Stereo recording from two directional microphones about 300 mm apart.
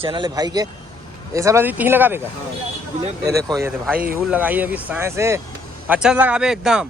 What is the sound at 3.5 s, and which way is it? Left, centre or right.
A man's voice, centre.